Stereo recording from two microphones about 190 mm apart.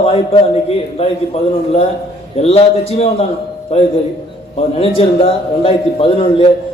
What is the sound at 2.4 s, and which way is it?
Speech, 35° left (ahead or behind).